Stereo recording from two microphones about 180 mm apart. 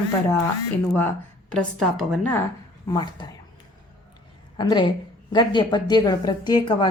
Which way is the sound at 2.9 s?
25° left (ahead or behind).